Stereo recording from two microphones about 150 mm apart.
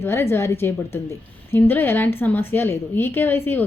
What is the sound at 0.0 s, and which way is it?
A woman's voice, 15° left (ahead or behind).